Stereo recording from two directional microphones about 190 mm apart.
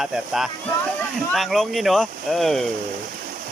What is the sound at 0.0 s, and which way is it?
Speech, centre (ahead or behind).